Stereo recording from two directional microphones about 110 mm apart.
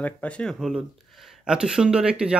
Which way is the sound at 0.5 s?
Centre (ahead or behind).